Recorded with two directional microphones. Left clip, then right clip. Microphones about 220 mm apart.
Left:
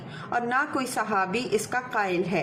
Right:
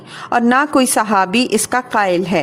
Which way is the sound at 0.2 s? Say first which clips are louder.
Right 12 dB; 55° right (ahead or behind).